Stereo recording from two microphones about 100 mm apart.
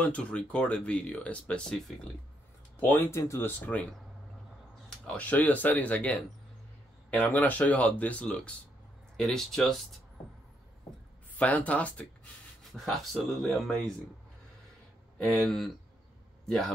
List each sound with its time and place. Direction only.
0.0 s speech: 15° left (ahead or behind)
2.8 s speech: 20° left (ahead or behind)
4.8 s speech: 10° left (ahead or behind)
11.3 s speech: 15° left (ahead or behind)
12.7 s speech: centre (ahead or behind)
15.1 s a man's voice: centre (ahead or behind)